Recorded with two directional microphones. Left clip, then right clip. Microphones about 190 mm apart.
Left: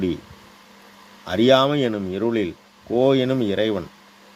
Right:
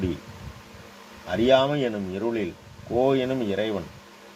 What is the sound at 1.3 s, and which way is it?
Speech, 50° left (ahead or behind).